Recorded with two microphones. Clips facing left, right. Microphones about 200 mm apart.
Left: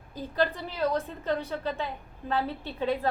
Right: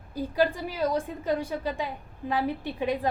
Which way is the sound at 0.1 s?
10° right (ahead or behind).